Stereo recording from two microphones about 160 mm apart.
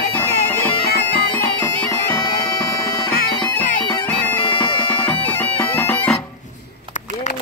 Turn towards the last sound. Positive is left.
turn(degrees=10)  # may be behind; listen again after turning